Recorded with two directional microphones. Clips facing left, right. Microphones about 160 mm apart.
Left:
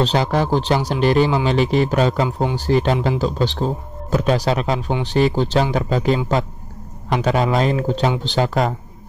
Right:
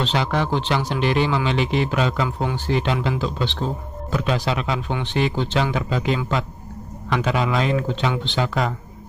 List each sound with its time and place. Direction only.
0.0 s speech: 40° left (ahead or behind)